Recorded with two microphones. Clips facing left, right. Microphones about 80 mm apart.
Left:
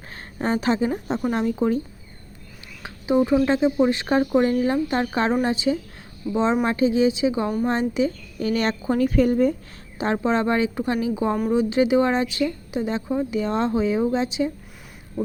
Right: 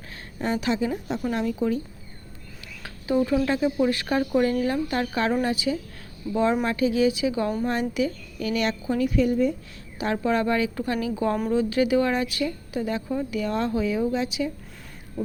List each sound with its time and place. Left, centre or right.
0.1 s a sound: left
0.9 s a woman's voice: left
2.8 s a woman's voice: left
10.0 s a woman's voice: left